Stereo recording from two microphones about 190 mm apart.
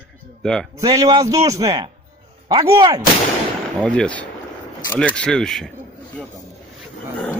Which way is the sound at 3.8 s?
5° left (ahead or behind).